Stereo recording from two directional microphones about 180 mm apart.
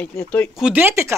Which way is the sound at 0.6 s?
10° right (ahead or behind).